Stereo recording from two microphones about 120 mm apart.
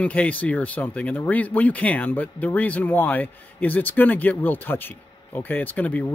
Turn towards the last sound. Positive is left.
turn(degrees=15)  # may be behind; listen again after turning